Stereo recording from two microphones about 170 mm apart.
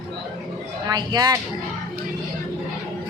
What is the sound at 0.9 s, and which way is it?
Speech, 25° right (ahead or behind).